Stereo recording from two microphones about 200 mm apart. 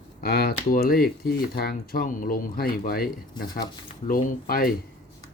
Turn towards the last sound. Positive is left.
turn(degrees=45)  # may be behind; listen again after turning